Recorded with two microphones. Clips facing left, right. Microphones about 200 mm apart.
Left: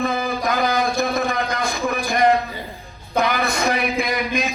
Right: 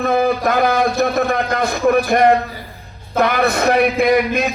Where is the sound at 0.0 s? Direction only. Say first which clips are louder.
Right 6 dB; 60° right (ahead or behind).